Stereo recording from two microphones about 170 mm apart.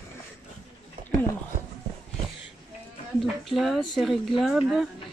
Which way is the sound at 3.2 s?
Centre (ahead or behind).